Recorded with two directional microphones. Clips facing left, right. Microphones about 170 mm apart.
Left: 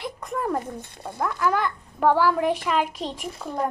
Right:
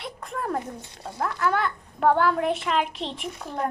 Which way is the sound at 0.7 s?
55° left (ahead or behind).